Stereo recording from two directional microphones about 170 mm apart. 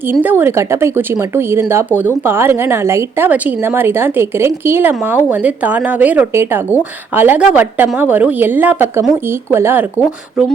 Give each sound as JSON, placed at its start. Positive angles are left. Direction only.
{"t": 0.2, "sound": "speech", "side_deg": -10}